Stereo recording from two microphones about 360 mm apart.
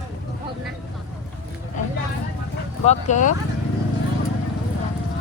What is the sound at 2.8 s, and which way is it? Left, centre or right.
Speech, centre.